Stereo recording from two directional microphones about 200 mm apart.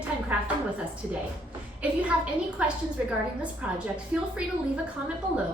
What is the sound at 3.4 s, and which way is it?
A woman's voice, 5° right (ahead or behind).